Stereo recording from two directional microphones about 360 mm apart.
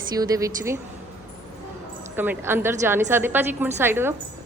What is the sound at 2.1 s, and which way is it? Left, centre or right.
A woman's voice, centre.